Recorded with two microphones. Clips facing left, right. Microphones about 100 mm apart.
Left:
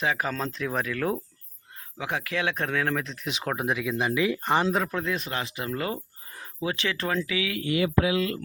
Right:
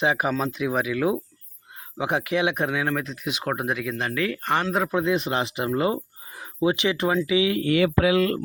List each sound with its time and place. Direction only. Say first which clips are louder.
0.0 s speech: right 5 dB; 20° right (ahead or behind)
2.0 s speech: right 6 dB; 25° right (ahead or behind); by 4.7 s 10° left (ahead or behind)
4.9 s speech: right 7 dB; 20° right (ahead or behind)
7.7 s speech: right 3 dB; 70° right (ahead or behind)